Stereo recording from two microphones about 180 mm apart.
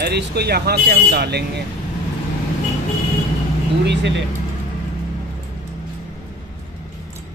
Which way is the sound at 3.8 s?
75° right (ahead or behind).